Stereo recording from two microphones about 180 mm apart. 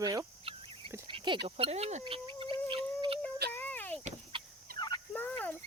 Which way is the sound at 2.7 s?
30° right (ahead or behind).